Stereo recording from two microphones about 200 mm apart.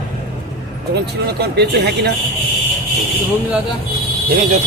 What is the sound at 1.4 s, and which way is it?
Speech, 55° right (ahead or behind).